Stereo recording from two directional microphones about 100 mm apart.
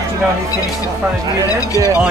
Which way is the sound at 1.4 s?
35° left (ahead or behind).